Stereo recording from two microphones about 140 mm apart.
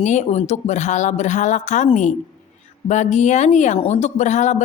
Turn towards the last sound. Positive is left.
turn(degrees=60)  # may be behind; listen again after turning